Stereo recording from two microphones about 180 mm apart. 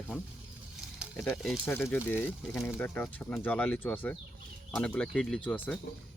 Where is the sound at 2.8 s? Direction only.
10° left (ahead or behind).